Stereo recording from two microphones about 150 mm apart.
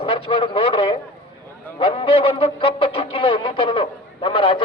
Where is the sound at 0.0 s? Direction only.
35° left (ahead or behind).